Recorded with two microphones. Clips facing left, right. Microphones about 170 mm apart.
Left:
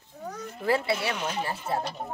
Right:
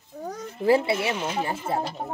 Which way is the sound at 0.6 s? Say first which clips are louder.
Right 5 dB; 25° right (ahead or behind).